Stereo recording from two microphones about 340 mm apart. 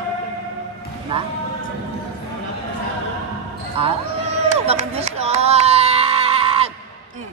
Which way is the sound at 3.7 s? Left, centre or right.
Centre.